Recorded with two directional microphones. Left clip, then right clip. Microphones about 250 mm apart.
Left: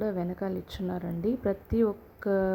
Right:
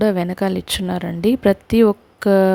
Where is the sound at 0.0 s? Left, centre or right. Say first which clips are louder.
Right 13 dB; right.